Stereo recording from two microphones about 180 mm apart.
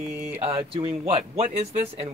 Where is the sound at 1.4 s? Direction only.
40° right (ahead or behind).